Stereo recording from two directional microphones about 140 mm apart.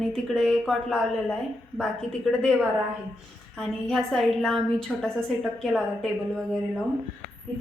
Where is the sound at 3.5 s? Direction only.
5° left (ahead or behind).